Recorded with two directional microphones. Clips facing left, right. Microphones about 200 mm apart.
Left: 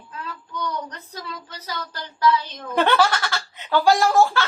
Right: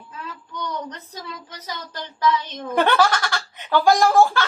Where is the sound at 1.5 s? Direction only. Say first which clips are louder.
Left 1 dB; 20° right (ahead or behind).